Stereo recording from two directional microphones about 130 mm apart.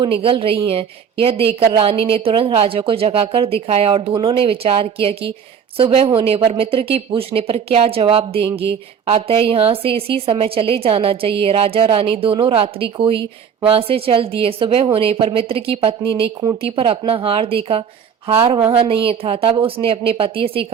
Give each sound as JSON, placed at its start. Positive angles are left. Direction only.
{"t": 0.0, "sound": "a woman's voice", "side_deg": -45}